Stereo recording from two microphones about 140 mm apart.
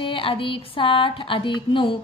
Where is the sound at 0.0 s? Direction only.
40° left (ahead or behind).